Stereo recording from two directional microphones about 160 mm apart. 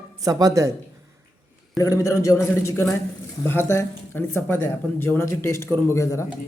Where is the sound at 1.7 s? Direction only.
20° left (ahead or behind).